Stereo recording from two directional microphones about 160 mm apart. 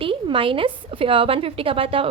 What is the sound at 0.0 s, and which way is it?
A woman's voice, 35° right (ahead or behind).